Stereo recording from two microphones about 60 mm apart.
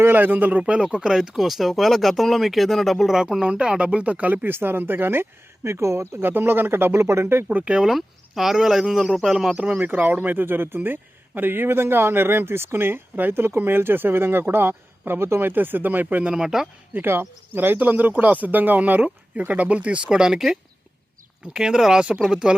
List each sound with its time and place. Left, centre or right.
0.0 s speech: right
0.6 s speech: centre
3.4 s speech: centre
4.4 s speech: right
6.2 s speech: right
7.5 s speech: centre
7.9 s speech: centre
9.6 s speech: right
16.3 s speech: centre
16.9 s speech: right
20.1 s speech: centre